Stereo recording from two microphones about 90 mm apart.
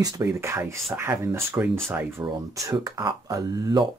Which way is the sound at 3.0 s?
50° right (ahead or behind).